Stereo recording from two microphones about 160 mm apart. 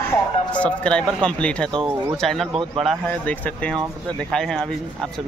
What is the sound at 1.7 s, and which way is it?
Speech, 35° right (ahead or behind).